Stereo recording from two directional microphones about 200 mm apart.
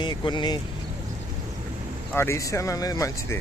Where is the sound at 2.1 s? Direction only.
15° left (ahead or behind).